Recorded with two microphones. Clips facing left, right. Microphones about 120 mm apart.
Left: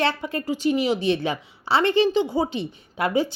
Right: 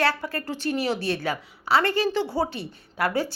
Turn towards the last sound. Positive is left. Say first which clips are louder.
# left 3 dB
turn(degrees=20)  # may be behind; listen again after turning